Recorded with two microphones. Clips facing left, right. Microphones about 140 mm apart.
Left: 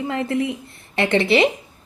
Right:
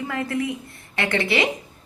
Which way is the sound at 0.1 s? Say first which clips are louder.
Left 3 dB; 25° left (ahead or behind).